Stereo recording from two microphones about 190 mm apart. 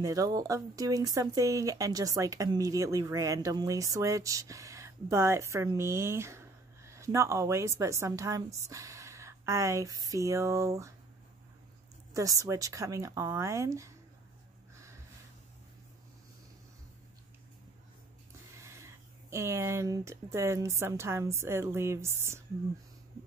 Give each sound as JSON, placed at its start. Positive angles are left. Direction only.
{"t": 0.0, "sound": "speech", "side_deg": -20}
{"t": 12.1, "sound": "speech", "side_deg": -15}
{"t": 18.6, "sound": "a sound", "side_deg": -15}
{"t": 19.3, "sound": "speech", "side_deg": -15}